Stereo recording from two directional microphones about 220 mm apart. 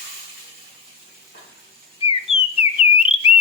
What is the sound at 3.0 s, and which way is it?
Bird, 25° left (ahead or behind).